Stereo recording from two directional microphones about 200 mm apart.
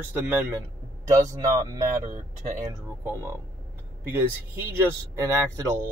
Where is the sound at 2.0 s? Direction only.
40° right (ahead or behind).